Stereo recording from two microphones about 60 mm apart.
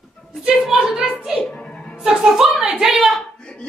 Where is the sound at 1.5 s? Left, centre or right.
Centre.